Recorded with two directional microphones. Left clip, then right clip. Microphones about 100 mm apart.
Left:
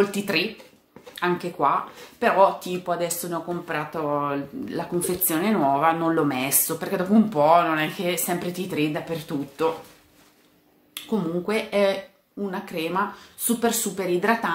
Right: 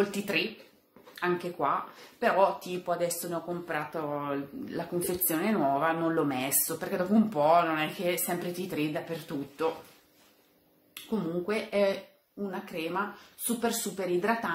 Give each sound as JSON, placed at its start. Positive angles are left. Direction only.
{"t": 0.2, "sound": "a woman's voice", "side_deg": 15}
{"t": 11.1, "sound": "a woman's voice", "side_deg": 15}